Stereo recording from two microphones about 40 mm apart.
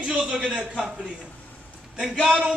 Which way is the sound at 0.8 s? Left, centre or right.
Right.